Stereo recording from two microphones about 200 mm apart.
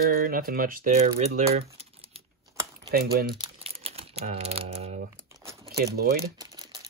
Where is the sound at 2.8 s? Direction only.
50° right (ahead or behind).